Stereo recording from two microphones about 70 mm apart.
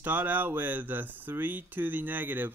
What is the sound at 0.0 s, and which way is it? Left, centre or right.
Speech, right.